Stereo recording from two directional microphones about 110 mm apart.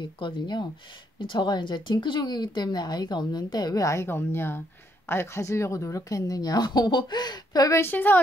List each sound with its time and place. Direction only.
0.0 s speech: 45° left (ahead or behind); by 7.9 s 30° left (ahead or behind)
7.9 s a woman's voice: 15° left (ahead or behind)